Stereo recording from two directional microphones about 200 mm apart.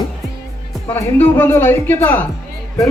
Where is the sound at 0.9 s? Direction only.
10° left (ahead or behind).